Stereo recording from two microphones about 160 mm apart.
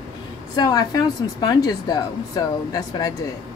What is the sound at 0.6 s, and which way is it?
Speech, 25° left (ahead or behind).